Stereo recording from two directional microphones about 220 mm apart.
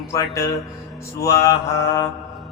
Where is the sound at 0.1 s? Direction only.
15° left (ahead or behind).